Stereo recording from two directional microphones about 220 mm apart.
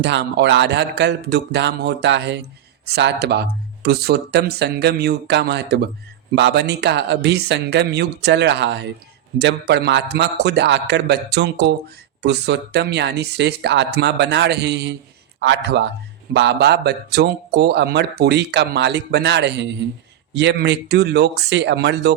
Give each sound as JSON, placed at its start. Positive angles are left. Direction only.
{"t": 0.0, "sound": "speech", "side_deg": -50}